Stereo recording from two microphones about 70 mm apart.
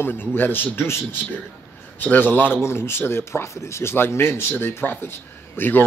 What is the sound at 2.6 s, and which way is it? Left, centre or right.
Speech, left.